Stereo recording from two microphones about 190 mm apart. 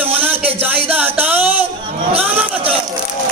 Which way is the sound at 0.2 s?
30° right (ahead or behind).